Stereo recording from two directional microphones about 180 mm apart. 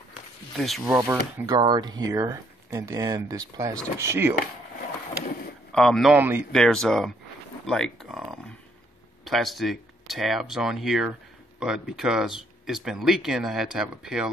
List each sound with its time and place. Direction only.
0.6 s speech: centre (ahead or behind)
0.8 s speech: 15° right (ahead or behind)
5.7 s a man's voice: 5° left (ahead or behind)
6.1 s speech: 10° right (ahead or behind)
6.5 s speech: 5° left (ahead or behind)